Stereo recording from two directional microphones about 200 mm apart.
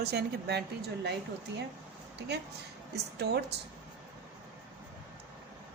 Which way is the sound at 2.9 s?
55° right (ahead or behind).